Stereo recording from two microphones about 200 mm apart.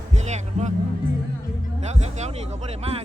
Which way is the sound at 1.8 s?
35° right (ahead or behind).